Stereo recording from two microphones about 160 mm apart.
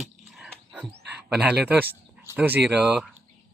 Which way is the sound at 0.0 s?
Centre (ahead or behind).